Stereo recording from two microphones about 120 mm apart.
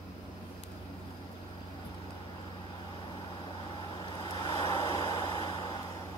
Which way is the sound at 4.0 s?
35° left (ahead or behind).